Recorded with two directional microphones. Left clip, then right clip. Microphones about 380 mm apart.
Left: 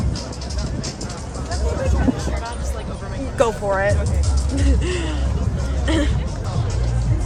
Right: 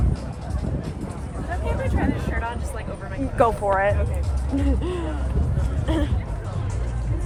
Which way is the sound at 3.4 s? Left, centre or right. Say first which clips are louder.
Left 1 dB; centre.